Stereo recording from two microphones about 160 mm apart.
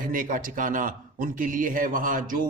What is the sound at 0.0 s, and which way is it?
A man's voice, 55° right (ahead or behind).